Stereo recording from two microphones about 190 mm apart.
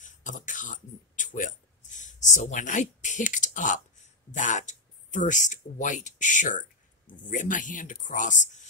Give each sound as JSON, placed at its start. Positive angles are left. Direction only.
{"t": 0.0, "sound": "speech", "side_deg": 40}